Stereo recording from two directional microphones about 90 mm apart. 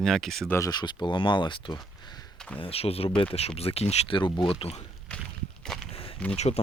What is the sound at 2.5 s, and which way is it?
Speech, 90° left.